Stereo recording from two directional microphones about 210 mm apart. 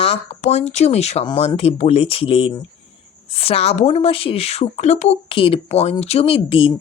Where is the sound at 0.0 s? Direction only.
30° left (ahead or behind).